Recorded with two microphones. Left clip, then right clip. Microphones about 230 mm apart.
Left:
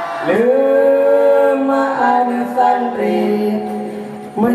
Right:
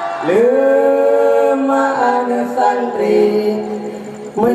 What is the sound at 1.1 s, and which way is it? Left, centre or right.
Music, right.